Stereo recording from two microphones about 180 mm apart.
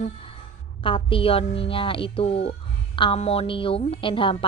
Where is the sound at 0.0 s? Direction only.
30° left (ahead or behind).